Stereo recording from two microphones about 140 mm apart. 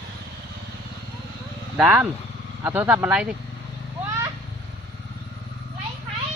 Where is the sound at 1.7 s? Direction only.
5° right (ahead or behind).